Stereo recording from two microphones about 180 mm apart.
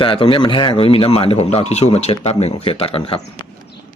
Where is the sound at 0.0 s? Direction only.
30° left (ahead or behind).